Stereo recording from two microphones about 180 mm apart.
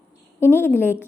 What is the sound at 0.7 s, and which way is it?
Speech, 10° left (ahead or behind).